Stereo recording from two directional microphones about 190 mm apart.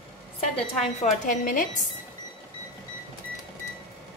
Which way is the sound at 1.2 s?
45° left (ahead or behind).